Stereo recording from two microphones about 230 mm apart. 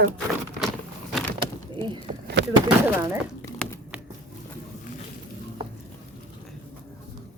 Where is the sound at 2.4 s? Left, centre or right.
Right.